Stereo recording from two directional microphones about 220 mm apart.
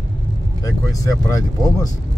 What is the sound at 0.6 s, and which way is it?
Speech, 15° left (ahead or behind).